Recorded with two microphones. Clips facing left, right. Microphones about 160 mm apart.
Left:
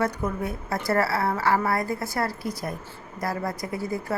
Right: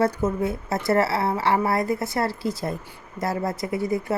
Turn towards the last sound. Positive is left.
turn(degrees=-25)  # may be behind; listen again after turning